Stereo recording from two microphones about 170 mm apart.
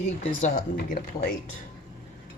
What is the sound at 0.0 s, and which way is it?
Speech, 45° left (ahead or behind).